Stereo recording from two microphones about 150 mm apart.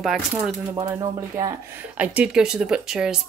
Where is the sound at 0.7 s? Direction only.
25° right (ahead or behind).